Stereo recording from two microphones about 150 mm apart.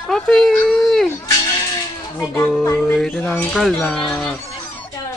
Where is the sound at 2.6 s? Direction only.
15° left (ahead or behind).